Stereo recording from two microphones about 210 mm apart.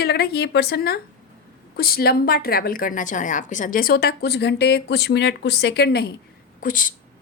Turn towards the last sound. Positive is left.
turn(degrees=40)  # may be behind; listen again after turning